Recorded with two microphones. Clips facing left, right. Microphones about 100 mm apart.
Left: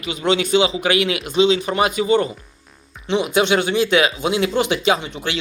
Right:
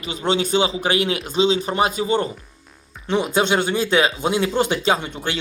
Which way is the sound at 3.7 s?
35° right (ahead or behind).